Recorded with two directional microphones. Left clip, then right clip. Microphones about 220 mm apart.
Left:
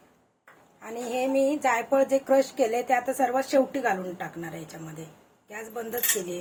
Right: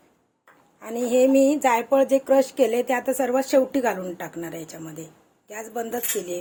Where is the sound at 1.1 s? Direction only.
50° right (ahead or behind).